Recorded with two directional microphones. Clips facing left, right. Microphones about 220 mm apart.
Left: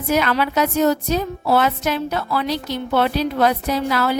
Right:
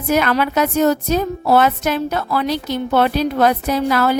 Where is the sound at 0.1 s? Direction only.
50° right (ahead or behind).